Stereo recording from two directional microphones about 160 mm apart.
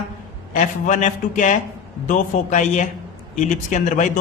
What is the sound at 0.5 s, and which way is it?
A man's voice, 50° left (ahead or behind).